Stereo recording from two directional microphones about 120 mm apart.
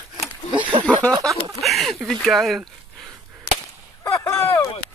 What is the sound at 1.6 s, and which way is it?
Speech, centre (ahead or behind).